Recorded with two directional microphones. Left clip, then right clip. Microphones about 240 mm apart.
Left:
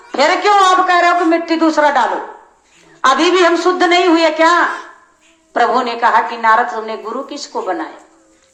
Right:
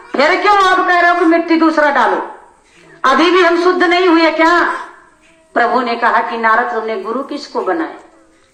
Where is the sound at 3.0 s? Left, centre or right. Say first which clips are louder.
Right 1 dB; left.